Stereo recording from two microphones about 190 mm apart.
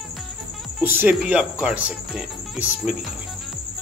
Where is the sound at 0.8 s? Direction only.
10° right (ahead or behind).